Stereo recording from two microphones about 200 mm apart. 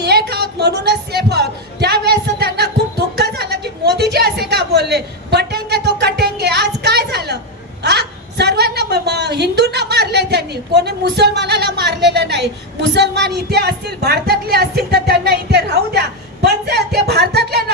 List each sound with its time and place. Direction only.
0.0 s music: 55° right (ahead or behind)
3.2 s a sound: 55° right (ahead or behind)
7.8 s a woman's voice: 55° right (ahead or behind)